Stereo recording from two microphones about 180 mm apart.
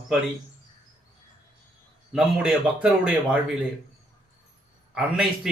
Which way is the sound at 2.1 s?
5° right (ahead or behind).